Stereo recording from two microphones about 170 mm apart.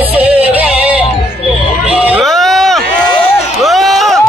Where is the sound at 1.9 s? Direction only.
5° right (ahead or behind).